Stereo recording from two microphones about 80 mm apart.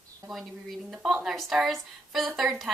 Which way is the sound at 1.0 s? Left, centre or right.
Centre.